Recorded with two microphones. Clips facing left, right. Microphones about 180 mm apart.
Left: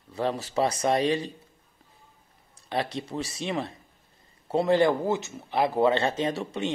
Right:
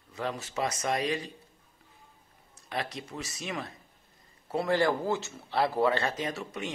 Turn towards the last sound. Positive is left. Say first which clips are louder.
# left 6 dB
turn(degrees=30)  # may be behind; listen again after turning